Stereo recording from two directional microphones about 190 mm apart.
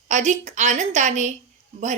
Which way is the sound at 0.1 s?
40° right (ahead or behind).